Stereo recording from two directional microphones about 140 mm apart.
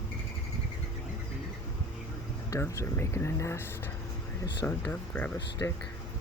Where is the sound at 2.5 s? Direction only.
20° left (ahead or behind).